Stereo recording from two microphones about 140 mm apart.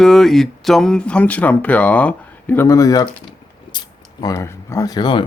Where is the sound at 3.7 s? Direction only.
30° left (ahead or behind).